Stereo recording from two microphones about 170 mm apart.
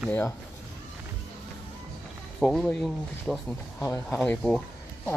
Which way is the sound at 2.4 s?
5° left (ahead or behind).